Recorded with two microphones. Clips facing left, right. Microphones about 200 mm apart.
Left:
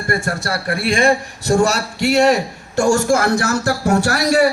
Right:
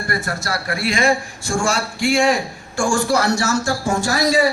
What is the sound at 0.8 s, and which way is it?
Speech, 55° left (ahead or behind).